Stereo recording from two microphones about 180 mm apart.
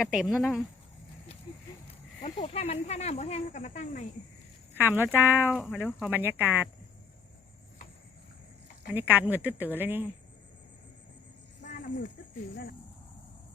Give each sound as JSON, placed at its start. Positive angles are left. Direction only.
{"t": 0.0, "sound": "speech", "side_deg": -5}
{"t": 2.2, "sound": "speech", "side_deg": 35}
{"t": 4.8, "sound": "speech", "side_deg": -10}
{"t": 8.9, "sound": "speech", "side_deg": -10}